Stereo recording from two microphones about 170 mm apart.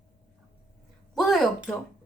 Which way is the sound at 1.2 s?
Centre (ahead or behind).